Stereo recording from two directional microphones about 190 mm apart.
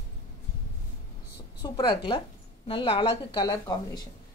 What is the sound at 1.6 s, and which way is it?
A woman's voice, 25° left (ahead or behind).